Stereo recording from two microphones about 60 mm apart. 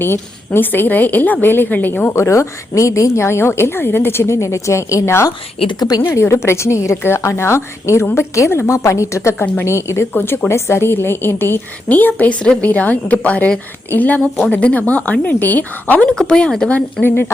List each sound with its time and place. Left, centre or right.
0.0 s a woman's voice: left
2.1 s a woman's voice: left
4.4 s a woman's voice: left
9.4 s a woman's voice: left
10.1 s a woman's voice: left
10.5 s a woman's voice: left
11.9 s speech: left; by 16.7 s centre
16.7 s a woman's voice: left